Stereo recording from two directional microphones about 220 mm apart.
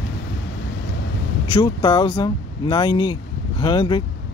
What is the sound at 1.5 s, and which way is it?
Speech, 20° left (ahead or behind).